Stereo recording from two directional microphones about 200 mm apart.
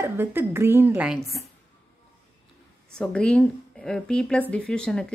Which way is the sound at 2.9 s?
5° left (ahead or behind).